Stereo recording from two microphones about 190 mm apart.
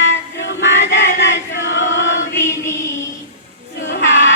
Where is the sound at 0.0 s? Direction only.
70° left (ahead or behind).